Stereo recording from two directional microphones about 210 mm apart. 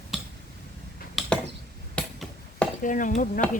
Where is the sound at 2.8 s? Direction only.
40° left (ahead or behind).